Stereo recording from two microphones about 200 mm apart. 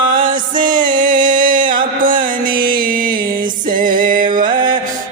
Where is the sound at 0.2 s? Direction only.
40° right (ahead or behind).